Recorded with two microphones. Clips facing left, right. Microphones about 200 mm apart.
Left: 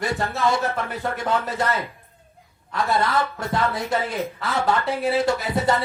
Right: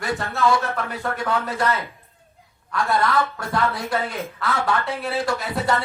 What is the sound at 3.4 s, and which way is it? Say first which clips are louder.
Speech: even; 25° left (ahead or behind).